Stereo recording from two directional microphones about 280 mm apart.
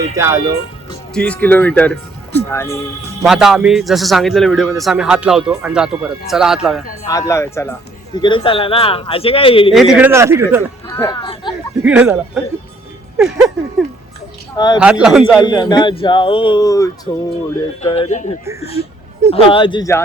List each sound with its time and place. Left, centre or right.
0.2 s speech: centre
1.1 s speech: centre
3.2 s a man's voice: centre
7.1 s speech: centre
9.7 s speech: centre
10.8 s a sound: centre
11.8 s a man's voice: centre
13.1 s a sound: centre
14.5 s a man's voice: centre
14.8 s a man's voice: centre
15.4 s speech: centre